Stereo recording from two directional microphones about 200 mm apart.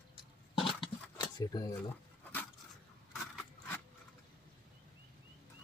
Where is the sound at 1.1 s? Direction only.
20° left (ahead or behind).